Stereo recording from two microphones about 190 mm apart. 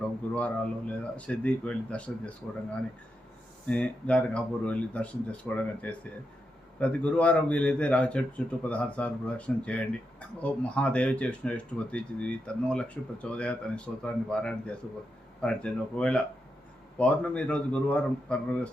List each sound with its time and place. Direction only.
0.3 s speech: 5° left (ahead or behind)
3.7 s speech: 5° left (ahead or behind)